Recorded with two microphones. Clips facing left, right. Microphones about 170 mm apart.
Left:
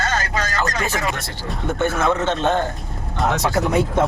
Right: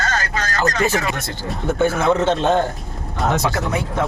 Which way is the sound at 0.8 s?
Centre (ahead or behind).